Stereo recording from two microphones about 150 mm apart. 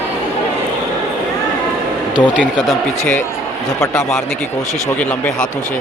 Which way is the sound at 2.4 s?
5° right (ahead or behind).